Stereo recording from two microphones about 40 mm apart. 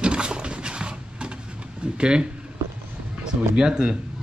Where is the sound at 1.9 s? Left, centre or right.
Right.